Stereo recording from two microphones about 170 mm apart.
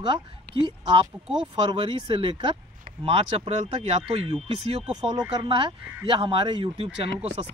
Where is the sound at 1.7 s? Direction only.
30° right (ahead or behind).